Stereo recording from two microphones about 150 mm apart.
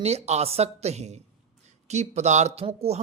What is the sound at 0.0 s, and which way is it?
A man's voice, 45° right (ahead or behind).